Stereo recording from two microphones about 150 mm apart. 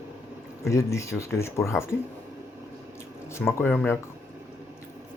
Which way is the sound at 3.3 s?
15° left (ahead or behind).